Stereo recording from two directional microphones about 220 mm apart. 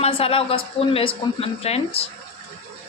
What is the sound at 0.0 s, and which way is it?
A man's voice, 25° left (ahead or behind).